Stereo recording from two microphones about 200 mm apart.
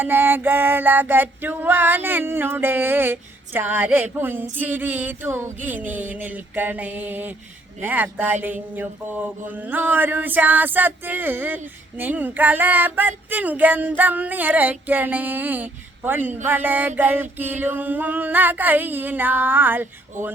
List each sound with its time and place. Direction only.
0.0 s mantra: 10° right (ahead or behind)
20.1 s speech: 40° right (ahead or behind)